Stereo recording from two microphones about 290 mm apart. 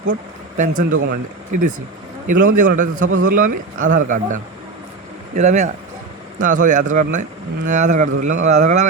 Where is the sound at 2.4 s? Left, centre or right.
Right.